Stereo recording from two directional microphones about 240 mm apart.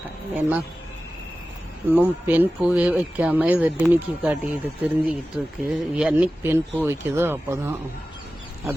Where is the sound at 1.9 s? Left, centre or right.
Centre.